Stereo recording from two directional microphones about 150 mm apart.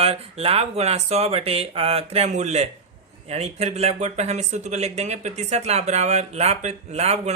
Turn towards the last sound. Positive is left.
turn(degrees=-45)  # may be behind; listen again after turning